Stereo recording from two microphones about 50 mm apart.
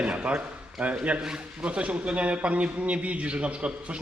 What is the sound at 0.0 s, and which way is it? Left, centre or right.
A man's voice, right.